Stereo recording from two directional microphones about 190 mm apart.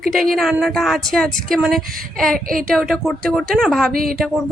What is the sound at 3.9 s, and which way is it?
Speech, 50° right (ahead or behind).